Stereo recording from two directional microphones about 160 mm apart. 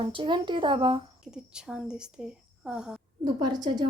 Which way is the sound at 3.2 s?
30° right (ahead or behind).